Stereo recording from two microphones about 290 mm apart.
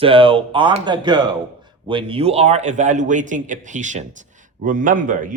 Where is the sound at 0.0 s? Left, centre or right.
Centre.